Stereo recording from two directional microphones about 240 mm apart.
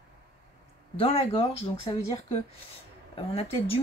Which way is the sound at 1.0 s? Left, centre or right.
Left.